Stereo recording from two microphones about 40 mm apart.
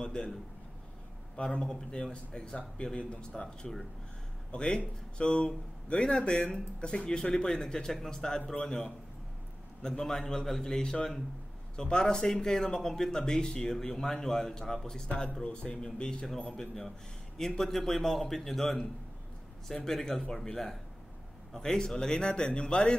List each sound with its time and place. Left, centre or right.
0.0 s a man's voice: left
1.3 s a man's voice: left
15.4 s a man's voice: left